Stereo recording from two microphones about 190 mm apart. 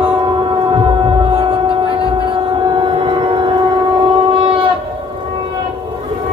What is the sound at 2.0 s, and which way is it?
Civil defense siren, 25° right (ahead or behind).